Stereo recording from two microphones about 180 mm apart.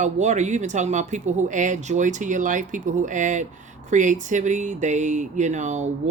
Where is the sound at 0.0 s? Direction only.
40° right (ahead or behind).